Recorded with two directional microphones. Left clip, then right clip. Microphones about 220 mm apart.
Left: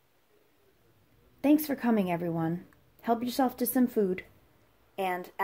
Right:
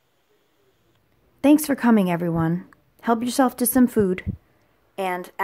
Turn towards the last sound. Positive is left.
turn(degrees=-20)  # may be behind; listen again after turning